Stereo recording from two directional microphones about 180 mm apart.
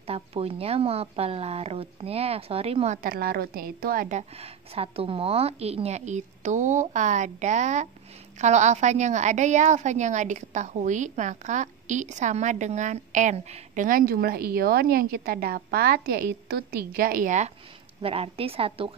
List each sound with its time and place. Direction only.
0.0 s a woman's voice: 35° right (ahead or behind)
3.0 s a woman's voice: 55° right (ahead or behind)
18.0 s a woman's voice: 35° right (ahead or behind)